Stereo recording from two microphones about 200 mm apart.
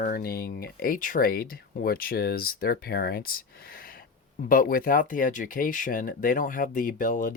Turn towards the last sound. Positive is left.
turn(degrees=40)  # may be behind; listen again after turning